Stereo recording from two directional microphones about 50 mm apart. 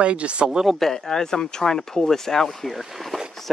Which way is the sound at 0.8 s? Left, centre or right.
Centre.